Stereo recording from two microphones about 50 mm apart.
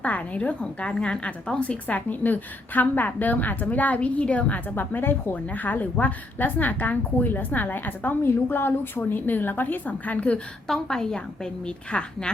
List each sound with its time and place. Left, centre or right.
0.0 s a woman's voice: left
10.7 s a woman's voice: centre